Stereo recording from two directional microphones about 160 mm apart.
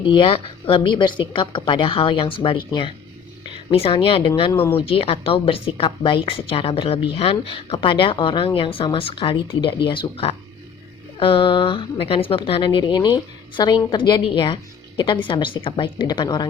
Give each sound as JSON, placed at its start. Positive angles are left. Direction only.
{"t": 0.0, "sound": "a woman's voice", "side_deg": 35}